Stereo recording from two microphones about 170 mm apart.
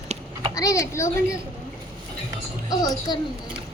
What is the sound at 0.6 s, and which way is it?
Child singing, 20° left (ahead or behind).